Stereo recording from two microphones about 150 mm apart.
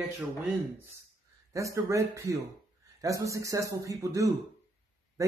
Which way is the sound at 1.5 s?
20° right (ahead or behind).